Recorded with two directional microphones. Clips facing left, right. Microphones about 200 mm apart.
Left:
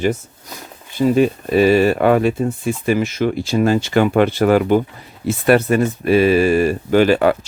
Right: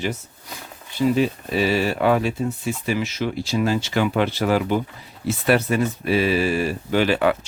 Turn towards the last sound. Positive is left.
turn(degrees=45)  # may be behind; listen again after turning